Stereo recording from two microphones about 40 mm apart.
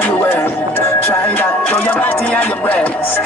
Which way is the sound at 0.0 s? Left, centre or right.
Left.